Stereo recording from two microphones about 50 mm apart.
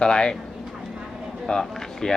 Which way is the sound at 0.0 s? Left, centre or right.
Centre.